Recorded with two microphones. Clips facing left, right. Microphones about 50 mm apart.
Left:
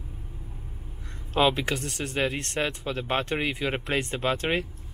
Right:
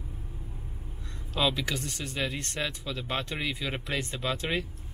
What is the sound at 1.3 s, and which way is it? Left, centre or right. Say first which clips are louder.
Speech: left 5 dB; left.